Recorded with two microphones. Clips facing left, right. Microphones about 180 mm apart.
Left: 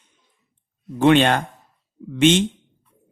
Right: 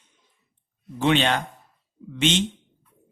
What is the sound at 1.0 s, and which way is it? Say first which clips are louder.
A man's voice: left 6 dB; 50° left (ahead or behind).